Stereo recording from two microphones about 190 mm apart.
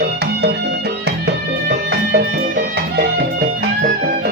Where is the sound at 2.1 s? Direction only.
60° right (ahead or behind).